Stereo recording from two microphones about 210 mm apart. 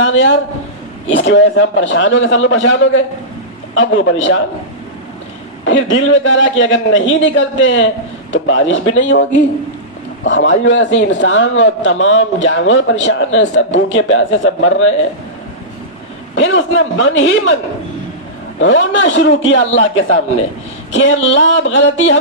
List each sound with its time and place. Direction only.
0.0 s a man's voice: 70° left (ahead or behind)
5.7 s a man's voice: 65° left (ahead or behind)
16.3 s a man's voice: 65° left (ahead or behind)
18.6 s a man's voice: 60° left (ahead or behind)
20.9 s a man's voice: 65° left (ahead or behind)